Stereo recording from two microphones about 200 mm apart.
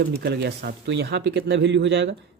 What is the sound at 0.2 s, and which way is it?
Speech, 55° right (ahead or behind).